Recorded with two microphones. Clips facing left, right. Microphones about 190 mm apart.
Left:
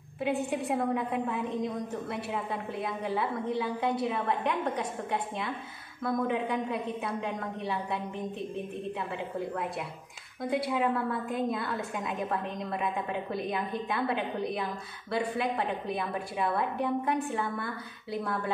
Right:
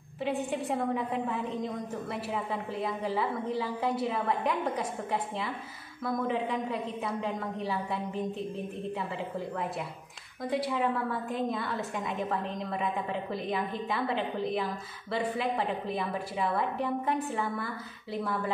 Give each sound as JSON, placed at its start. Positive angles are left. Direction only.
{"t": 0.2, "sound": "a woman's voice", "side_deg": 0}
{"t": 10.4, "sound": "a woman's voice", "side_deg": 0}